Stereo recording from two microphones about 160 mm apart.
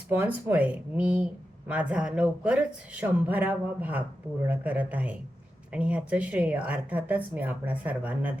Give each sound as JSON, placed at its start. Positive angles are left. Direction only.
{"t": 0.1, "sound": "speech", "side_deg": -10}